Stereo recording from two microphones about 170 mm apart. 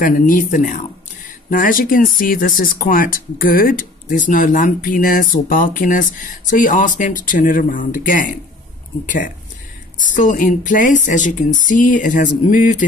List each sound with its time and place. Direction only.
0.0 s speech: 50° left (ahead or behind)
9.9 s speech: 50° left (ahead or behind)